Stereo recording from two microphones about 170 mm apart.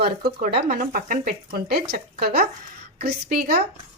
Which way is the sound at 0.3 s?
65° right (ahead or behind).